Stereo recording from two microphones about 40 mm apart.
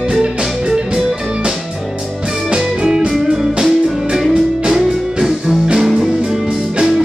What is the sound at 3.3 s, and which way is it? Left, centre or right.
Music, centre.